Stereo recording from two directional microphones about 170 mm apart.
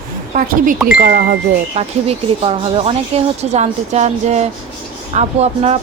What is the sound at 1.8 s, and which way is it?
Speech, 35° right (ahead or behind).